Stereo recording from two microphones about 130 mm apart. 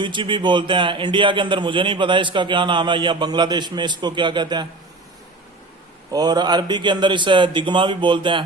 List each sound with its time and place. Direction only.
0.0 s a man's voice: 40° right (ahead or behind)
6.1 s a man's voice: 30° right (ahead or behind)